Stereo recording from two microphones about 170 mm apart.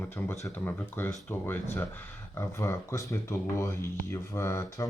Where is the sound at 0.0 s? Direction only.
10° left (ahead or behind).